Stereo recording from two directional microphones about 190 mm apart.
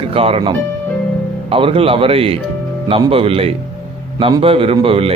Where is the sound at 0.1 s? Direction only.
30° right (ahead or behind).